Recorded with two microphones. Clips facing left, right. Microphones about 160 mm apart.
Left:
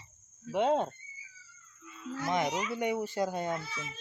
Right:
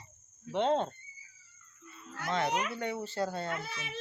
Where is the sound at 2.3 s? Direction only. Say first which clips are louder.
Even; 15° left (ahead or behind).